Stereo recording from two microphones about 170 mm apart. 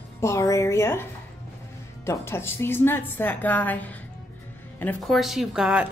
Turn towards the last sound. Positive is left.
turn(degrees=-5)  # may be behind; listen again after turning